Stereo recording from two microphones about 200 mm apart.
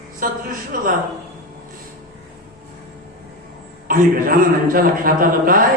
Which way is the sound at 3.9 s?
45° right (ahead or behind).